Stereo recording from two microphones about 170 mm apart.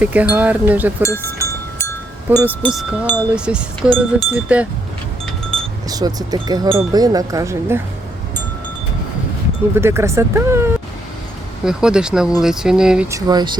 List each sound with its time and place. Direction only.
0.0 s speech: 10° right (ahead or behind)
1.0 s wind chime: 15° left (ahead or behind)
2.4 s speech: 5° right (ahead or behind)
5.5 s cowbell: 5° left (ahead or behind)
5.9 s speech: 20° right (ahead or behind)
9.7 s speech: 15° right (ahead or behind)
11.6 s speech: 5° right (ahead or behind)
13.1 s speech: 20° right (ahead or behind)